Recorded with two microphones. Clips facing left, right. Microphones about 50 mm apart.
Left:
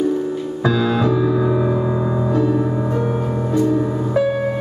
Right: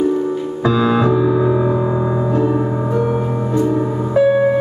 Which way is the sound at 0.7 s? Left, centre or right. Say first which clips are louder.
Right 3 dB; centre.